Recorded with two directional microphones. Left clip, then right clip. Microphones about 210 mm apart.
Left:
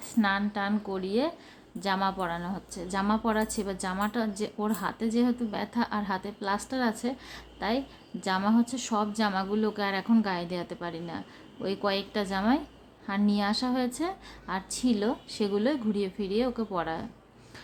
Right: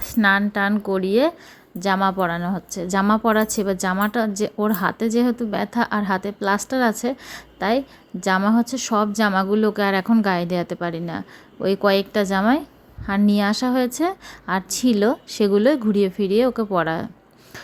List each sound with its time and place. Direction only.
0.0 s a woman's voice: 30° right (ahead or behind)